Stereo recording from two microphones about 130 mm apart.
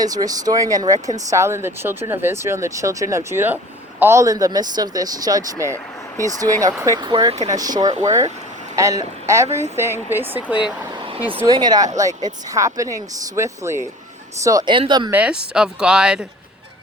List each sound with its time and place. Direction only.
0.0 s speech: 30° right (ahead or behind)
7.1 s speech: 40° right (ahead or behind)
7.4 s speech: 30° right (ahead or behind)
11.4 s speech: 30° right (ahead or behind)
14.7 s speech: 40° right (ahead or behind)
15.1 s speech: 10° right (ahead or behind)